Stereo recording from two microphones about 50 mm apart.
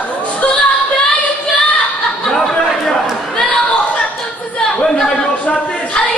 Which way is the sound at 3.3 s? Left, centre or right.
Centre.